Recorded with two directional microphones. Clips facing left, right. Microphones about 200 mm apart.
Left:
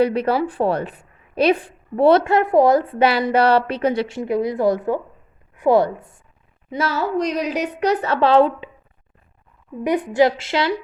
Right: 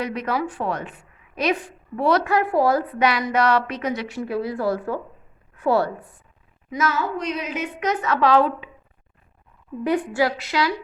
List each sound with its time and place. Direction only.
0.0 s a woman's voice: 30° left (ahead or behind)
6.7 s a woman's voice: 30° left (ahead or behind)
9.8 s a woman's voice: 15° left (ahead or behind)